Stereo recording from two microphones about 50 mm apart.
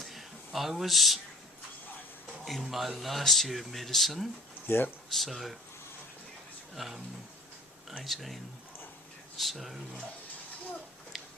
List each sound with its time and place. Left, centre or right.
0.0 s a sound: centre
2.4 s speech: centre
4.7 s speech: left
5.0 s speech: centre
6.7 s speech: centre
8.0 s speech: centre
9.4 s speech: centre
11.1 s a sound: centre